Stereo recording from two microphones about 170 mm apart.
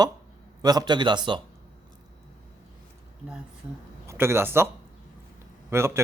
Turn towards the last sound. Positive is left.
turn(degrees=-15)  # may be behind; listen again after turning